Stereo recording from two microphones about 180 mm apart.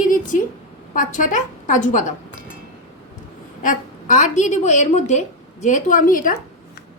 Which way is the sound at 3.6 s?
45° left (ahead or behind).